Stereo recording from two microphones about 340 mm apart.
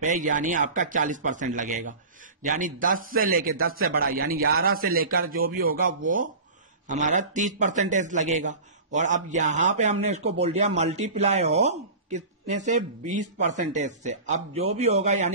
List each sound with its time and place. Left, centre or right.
0.2 s a man's voice: right